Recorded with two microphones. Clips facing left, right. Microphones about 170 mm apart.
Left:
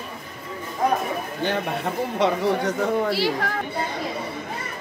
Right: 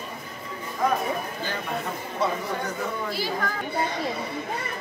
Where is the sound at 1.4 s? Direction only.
65° left (ahead or behind).